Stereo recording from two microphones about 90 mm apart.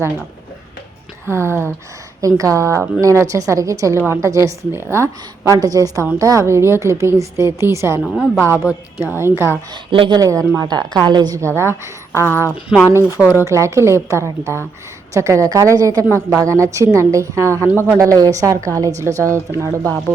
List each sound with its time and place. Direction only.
1.3 s a woman's voice: 30° right (ahead or behind)
5.5 s a woman's voice: 40° right (ahead or behind)
8.4 s a woman's voice: 20° right (ahead or behind)
9.7 s speech: 75° right (ahead or behind)
10.1 s a woman's voice: 40° right (ahead or behind)
11.3 s a woman's voice: 30° right (ahead or behind)
12.2 s speech: 25° left (ahead or behind)
12.9 s a woman's voice: 30° right (ahead or behind)
16.0 s a woman's voice: 25° right (ahead or behind)